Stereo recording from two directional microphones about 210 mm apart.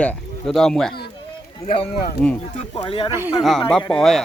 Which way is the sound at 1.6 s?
25° left (ahead or behind).